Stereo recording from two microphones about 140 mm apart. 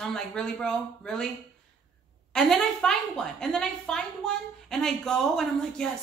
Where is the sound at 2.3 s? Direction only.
5° left (ahead or behind).